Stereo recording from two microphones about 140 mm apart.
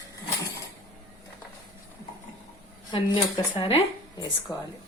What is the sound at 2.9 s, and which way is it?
Speech, 35° left (ahead or behind).